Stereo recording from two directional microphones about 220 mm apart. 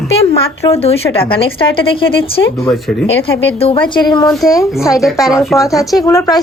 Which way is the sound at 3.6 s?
20° left (ahead or behind).